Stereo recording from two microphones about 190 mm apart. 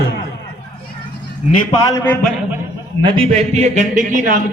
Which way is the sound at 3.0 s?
35° right (ahead or behind).